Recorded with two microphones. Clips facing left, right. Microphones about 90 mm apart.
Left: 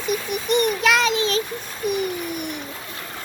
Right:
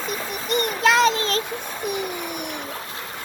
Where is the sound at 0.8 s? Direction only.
35° right (ahead or behind).